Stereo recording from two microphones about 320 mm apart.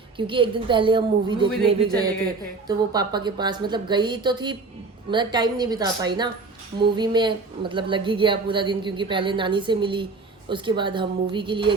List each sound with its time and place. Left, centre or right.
0.2 s a woman's voice: centre
2.6 s a woman's voice: centre